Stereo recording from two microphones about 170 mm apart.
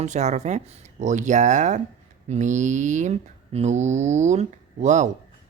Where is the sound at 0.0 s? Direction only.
45° right (ahead or behind).